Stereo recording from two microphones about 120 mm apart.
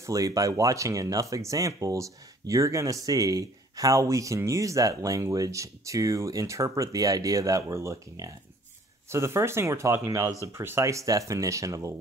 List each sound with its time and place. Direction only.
0.0 s speech: 25° right (ahead or behind)